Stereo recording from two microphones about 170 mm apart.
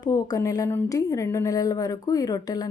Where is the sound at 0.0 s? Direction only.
20° left (ahead or behind).